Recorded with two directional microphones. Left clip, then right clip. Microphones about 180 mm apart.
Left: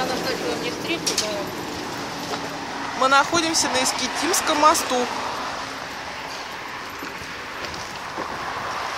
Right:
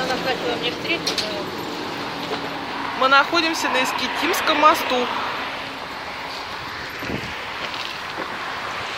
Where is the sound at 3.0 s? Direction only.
10° left (ahead or behind).